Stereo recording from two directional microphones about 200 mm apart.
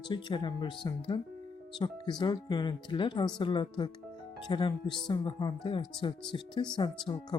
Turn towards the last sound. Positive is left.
turn(degrees=20)  # may be behind; listen again after turning